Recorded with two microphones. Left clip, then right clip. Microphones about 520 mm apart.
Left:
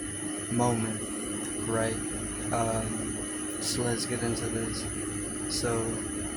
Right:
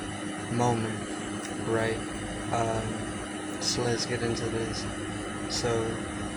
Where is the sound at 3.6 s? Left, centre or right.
Left.